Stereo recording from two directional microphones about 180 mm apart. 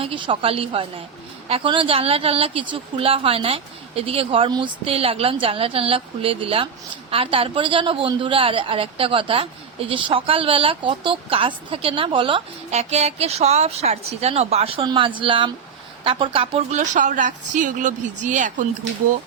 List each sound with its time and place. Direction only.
0.0 s a woman's voice: 30° right (ahead or behind)